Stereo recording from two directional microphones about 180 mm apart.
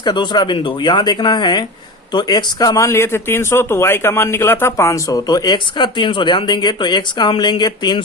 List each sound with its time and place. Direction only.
0.0 s speech: 25° left (ahead or behind)